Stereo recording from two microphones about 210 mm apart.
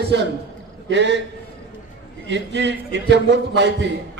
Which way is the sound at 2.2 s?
55° right (ahead or behind).